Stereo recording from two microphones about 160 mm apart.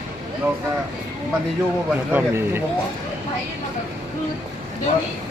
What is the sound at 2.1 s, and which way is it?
Speech, 15° right (ahead or behind).